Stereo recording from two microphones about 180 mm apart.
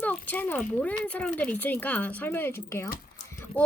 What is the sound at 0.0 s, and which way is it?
A child's voice, 10° left (ahead or behind).